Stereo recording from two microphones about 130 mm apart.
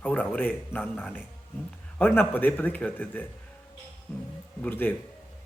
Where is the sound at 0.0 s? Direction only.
10° left (ahead or behind).